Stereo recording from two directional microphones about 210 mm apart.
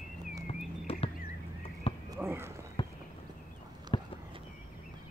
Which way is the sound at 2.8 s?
25° left (ahead or behind).